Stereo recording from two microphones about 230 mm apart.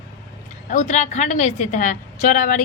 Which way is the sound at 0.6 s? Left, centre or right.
Left.